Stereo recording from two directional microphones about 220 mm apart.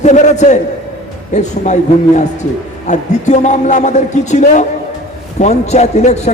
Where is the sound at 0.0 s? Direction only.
30° left (ahead or behind).